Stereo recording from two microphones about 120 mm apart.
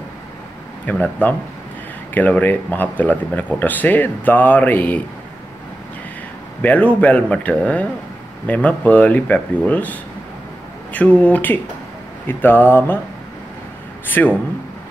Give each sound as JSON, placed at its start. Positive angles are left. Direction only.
{"t": 0.8, "sound": "speech", "side_deg": 15}
{"t": 6.6, "sound": "speech", "side_deg": 15}
{"t": 14.0, "sound": "speech", "side_deg": 15}